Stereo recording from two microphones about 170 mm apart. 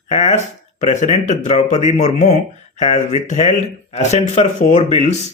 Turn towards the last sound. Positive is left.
turn(degrees=45)  # may be behind; listen again after turning